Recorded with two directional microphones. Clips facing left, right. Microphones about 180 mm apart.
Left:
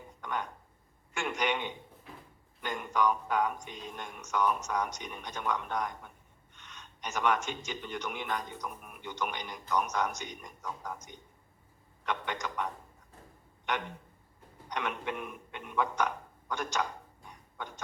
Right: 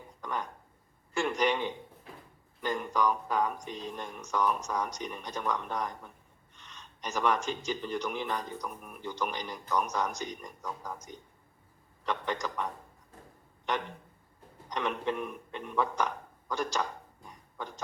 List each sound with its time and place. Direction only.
0.3 s a man's voice: 35° right (ahead or behind)
14.8 s a man's voice: 35° right (ahead or behind)